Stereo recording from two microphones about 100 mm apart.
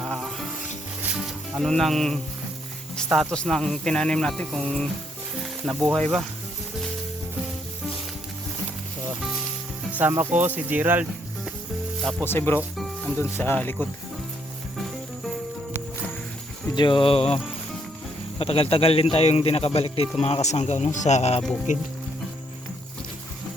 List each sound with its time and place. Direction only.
0.0 s sizzle: centre (ahead or behind)
1.1 s speech: centre (ahead or behind)
3.3 s speech: 5° left (ahead or behind)
10.0 s speech: 20° right (ahead or behind)
12.2 s speech: 20° left (ahead or behind)
12.7 s music: centre (ahead or behind)
13.3 s speech: 20° left (ahead or behind)
16.7 s speech: 55° left (ahead or behind)
18.3 s speech: 70° left (ahead or behind); by 21.4 s 90° left